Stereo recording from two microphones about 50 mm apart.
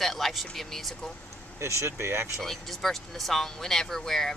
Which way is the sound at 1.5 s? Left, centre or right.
Right.